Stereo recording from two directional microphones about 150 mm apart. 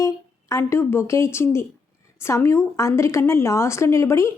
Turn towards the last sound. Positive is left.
turn(degrees=20)  # may be behind; listen again after turning